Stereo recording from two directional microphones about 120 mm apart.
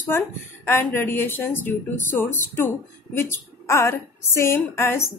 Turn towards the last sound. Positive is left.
turn(degrees=20)  # may be behind; listen again after turning